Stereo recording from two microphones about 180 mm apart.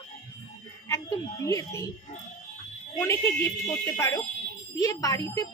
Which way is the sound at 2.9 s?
15° left (ahead or behind).